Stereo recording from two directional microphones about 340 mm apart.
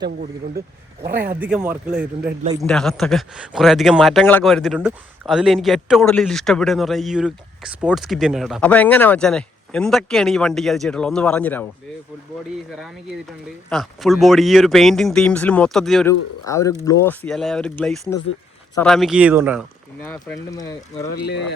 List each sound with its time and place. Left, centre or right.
0.0 s speech: right
1.4 s speech: centre
13.7 s speech: centre